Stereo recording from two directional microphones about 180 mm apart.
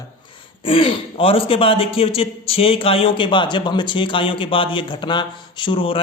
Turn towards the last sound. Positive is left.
turn(degrees=30)  # may be behind; listen again after turning